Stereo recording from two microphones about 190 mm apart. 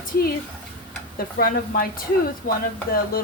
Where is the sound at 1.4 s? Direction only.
50° left (ahead or behind).